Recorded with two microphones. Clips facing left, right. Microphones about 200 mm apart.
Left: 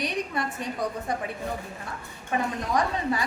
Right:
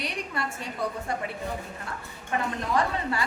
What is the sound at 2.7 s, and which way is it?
Speech, 15° left (ahead or behind).